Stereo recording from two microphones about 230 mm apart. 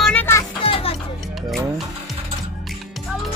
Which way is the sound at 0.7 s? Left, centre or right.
Left.